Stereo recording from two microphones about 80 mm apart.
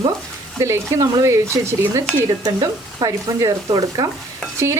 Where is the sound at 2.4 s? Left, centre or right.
Right.